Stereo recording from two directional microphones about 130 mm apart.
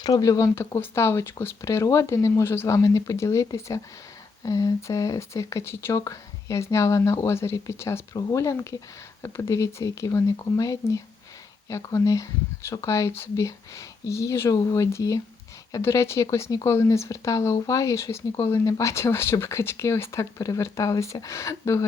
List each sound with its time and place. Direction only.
0.0 s speech: 30° left (ahead or behind)